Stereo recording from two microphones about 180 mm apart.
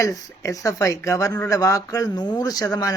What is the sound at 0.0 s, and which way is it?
Speech, 20° left (ahead or behind).